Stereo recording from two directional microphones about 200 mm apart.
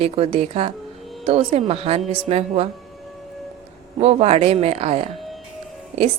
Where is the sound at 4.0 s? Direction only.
30° right (ahead or behind).